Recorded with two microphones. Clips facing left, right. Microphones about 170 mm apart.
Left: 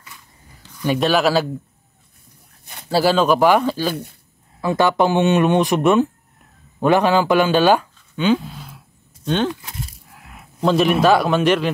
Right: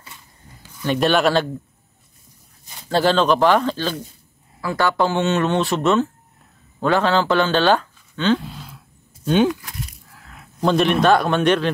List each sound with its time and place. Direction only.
0.8 s a man's voice: centre (ahead or behind)
2.9 s speech: 5° left (ahead or behind)
4.6 s speech: 20° left (ahead or behind)
8.4 s a sound: centre (ahead or behind)
9.5 s a sound: 25° left (ahead or behind)
10.6 s a man's voice: centre (ahead or behind)